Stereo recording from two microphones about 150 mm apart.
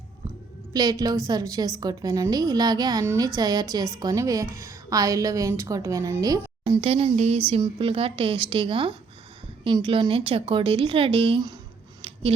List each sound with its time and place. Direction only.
0.7 s a woman's voice: 25° right (ahead or behind)
6.8 s a sound: 40° right (ahead or behind)
7.6 s speech: 35° right (ahead or behind)